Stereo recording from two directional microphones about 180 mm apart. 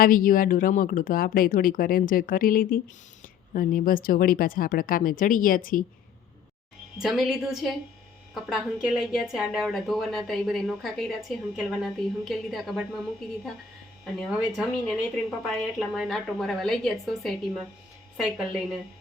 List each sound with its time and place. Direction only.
0.0 s speech: 50° left (ahead or behind)
7.0 s speech: centre (ahead or behind)
14.0 s speech: centre (ahead or behind)